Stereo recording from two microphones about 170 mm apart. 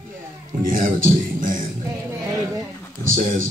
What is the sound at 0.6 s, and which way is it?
Speech, 55° right (ahead or behind).